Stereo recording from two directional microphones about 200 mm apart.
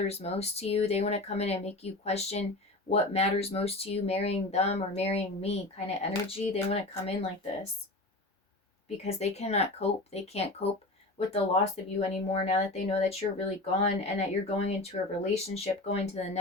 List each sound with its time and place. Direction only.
0.1 s speech: 30° left (ahead or behind)
9.0 s speech: 30° left (ahead or behind)